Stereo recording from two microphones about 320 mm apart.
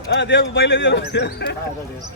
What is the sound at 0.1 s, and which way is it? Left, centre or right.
Speech, left.